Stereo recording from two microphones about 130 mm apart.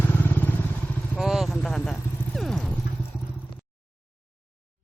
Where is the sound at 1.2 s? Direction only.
Centre (ahead or behind).